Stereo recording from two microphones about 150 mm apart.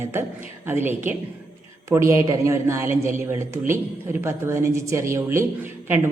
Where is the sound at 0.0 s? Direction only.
15° right (ahead or behind).